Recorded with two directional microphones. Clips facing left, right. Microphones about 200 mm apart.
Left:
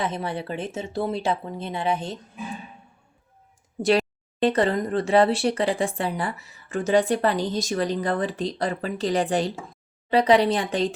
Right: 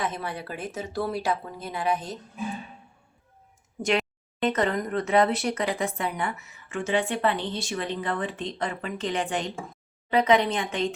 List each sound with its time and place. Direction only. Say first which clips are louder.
0.0 s speech: left 3 dB; 30° left (ahead or behind)
3.8 s speech: left 5 dB; 35° left (ahead or behind)